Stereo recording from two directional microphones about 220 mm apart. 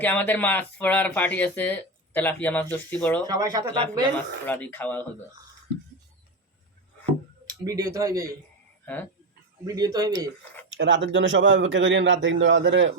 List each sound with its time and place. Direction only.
0.0 s speech: 10° left (ahead or behind)
3.2 s speech: 15° right (ahead or behind)
4.4 s speech: 5° left (ahead or behind)
7.0 s a sound: 20° right (ahead or behind)
9.6 s speech: 15° right (ahead or behind)
10.7 s a man's voice: 55° right (ahead or behind)